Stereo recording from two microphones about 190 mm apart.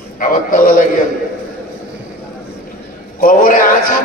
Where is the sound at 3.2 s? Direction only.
45° left (ahead or behind).